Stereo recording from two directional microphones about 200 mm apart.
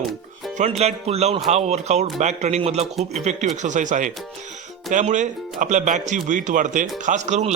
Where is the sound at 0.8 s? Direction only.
30° right (ahead or behind).